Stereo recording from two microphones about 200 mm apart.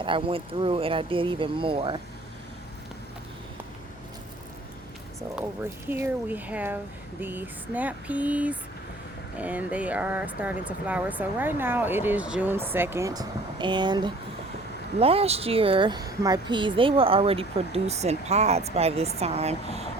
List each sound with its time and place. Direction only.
0.0 s speech: 25° right (ahead or behind)
5.4 s speech: 10° right (ahead or behind); by 19.8 s 30° right (ahead or behind)